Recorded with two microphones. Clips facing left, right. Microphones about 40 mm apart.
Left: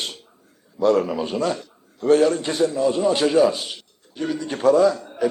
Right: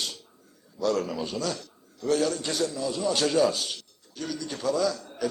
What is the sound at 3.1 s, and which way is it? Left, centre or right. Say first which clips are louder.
Speech: left 2 dB; left.